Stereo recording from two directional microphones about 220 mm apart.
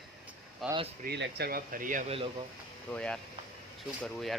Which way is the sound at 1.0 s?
45° right (ahead or behind).